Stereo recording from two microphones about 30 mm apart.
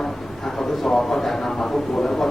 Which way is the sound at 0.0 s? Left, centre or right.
Centre.